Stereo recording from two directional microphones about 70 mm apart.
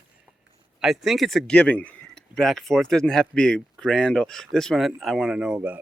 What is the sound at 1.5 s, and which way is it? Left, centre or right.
Speech, centre.